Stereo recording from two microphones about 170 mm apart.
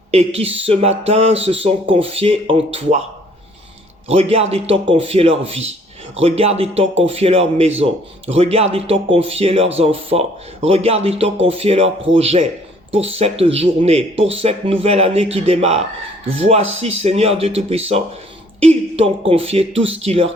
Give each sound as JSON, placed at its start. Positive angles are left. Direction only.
{"t": 0.1, "sound": "speech", "side_deg": -35}
{"t": 4.1, "sound": "speech", "side_deg": -35}